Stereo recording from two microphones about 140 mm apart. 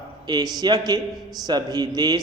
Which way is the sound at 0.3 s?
30° right (ahead or behind).